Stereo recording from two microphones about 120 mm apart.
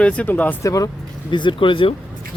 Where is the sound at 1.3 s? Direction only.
40° left (ahead or behind).